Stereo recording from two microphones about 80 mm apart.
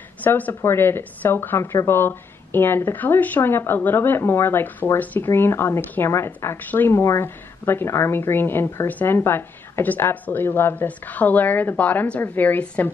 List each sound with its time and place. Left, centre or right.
0.2 s a woman's voice: left